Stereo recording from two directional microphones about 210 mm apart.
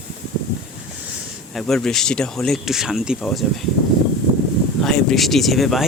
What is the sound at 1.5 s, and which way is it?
Speech, centre (ahead or behind).